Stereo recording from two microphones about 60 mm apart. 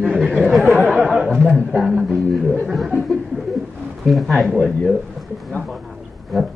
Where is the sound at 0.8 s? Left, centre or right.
Centre.